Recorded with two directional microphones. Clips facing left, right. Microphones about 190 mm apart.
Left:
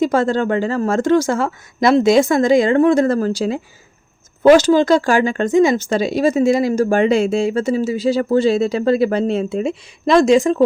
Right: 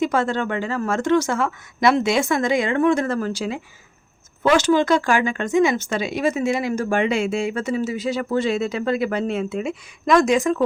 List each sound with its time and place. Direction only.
0.0 s speech: 35° left (ahead or behind)